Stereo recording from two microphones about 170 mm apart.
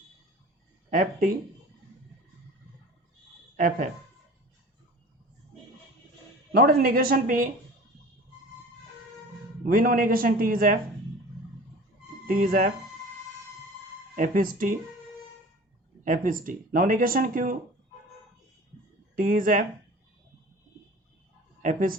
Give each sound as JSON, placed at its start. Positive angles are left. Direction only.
{"t": 0.9, "sound": "speech", "side_deg": -55}
{"t": 6.5, "sound": "a man's voice", "side_deg": -60}
{"t": 9.6, "sound": "a man's voice", "side_deg": -55}
{"t": 12.2, "sound": "speech", "side_deg": -50}
{"t": 14.2, "sound": "speech", "side_deg": -55}
{"t": 16.0, "sound": "speech", "side_deg": -55}
{"t": 19.1, "sound": "a man's voice", "side_deg": -55}
{"t": 21.6, "sound": "speech", "side_deg": -50}